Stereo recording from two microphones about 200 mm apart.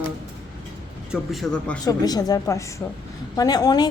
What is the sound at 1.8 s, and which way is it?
A woman's voice, 20° left (ahead or behind).